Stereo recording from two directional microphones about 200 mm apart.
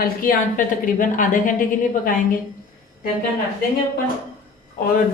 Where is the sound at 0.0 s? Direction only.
45° left (ahead or behind).